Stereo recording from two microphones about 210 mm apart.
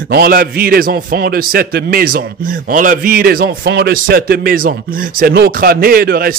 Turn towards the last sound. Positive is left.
turn(degrees=-45)  # may be behind; listen again after turning